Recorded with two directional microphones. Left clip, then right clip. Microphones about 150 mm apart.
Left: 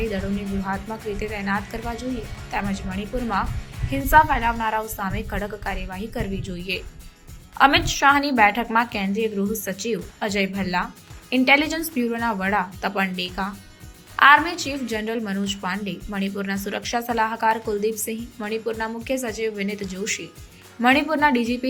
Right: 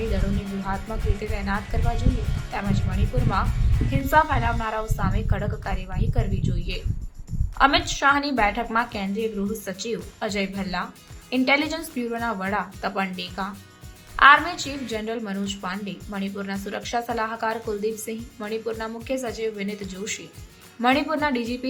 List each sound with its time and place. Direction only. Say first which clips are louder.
0.7 s a woman's voice: left 1 dB; 15° left (ahead or behind)